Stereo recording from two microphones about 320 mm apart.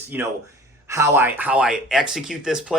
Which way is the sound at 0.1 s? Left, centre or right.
Centre.